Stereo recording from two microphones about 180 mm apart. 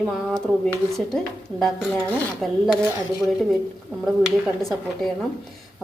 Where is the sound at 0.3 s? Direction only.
5° left (ahead or behind).